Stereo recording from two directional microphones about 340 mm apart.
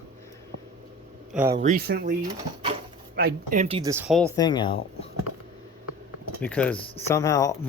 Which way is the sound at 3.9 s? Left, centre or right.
Centre.